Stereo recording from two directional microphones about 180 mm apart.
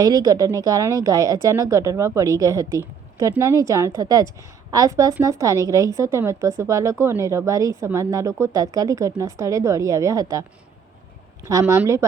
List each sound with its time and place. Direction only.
0.0 s speech: 20° right (ahead or behind)
11.4 s speech: 15° right (ahead or behind)